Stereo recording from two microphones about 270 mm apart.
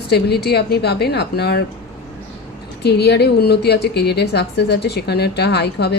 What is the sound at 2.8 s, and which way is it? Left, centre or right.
A woman's voice, left.